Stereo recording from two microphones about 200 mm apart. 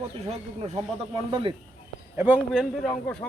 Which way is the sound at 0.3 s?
30° right (ahead or behind).